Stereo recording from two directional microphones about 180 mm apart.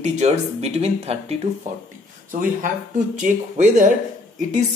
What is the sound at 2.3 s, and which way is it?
Speech, 50° right (ahead or behind).